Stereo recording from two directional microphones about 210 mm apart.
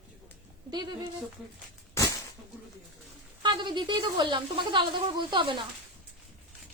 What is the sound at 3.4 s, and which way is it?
Speech, 20° right (ahead or behind).